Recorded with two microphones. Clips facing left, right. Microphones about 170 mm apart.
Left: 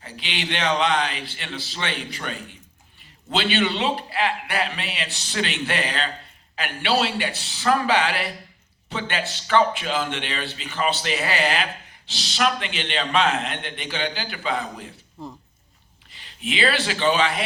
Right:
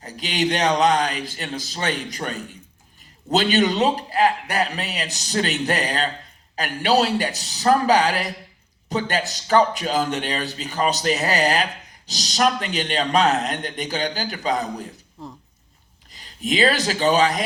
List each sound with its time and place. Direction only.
0.0 s a man's voice: 40° right (ahead or behind)
15.2 s speech: centre (ahead or behind)
16.0 s speech: 40° right (ahead or behind)